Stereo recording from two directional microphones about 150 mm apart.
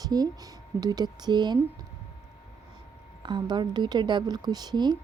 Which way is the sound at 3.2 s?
30° right (ahead or behind).